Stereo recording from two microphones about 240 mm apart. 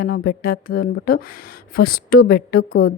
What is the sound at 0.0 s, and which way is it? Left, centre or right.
A woman's voice, left.